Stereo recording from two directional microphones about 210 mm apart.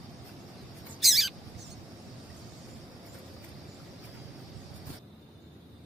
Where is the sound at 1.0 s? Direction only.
Centre (ahead or behind).